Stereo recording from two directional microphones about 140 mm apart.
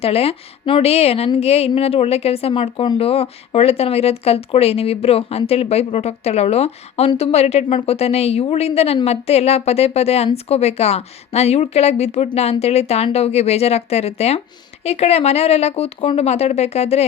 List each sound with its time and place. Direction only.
0.0 s a woman's voice: 45° left (ahead or behind)